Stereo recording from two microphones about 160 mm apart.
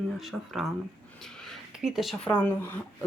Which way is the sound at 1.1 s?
5° left (ahead or behind).